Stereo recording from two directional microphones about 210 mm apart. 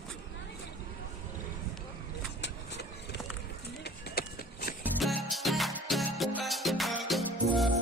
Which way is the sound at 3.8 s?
50° left (ahead or behind).